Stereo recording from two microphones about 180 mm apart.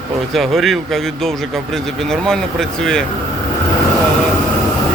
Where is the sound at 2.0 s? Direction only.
5° left (ahead or behind).